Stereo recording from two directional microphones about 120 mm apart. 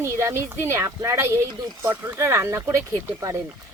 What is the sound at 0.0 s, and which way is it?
Speech, 20° right (ahead or behind).